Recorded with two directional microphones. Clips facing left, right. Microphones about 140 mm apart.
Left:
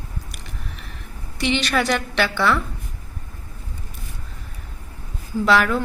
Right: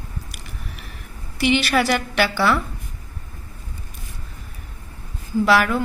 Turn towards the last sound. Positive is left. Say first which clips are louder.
# even
turn(degrees=-5)  # may be behind; listen again after turning